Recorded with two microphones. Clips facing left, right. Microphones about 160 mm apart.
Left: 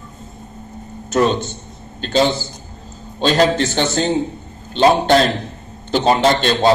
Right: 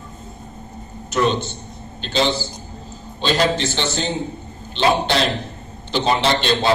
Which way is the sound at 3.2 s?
45° left (ahead or behind).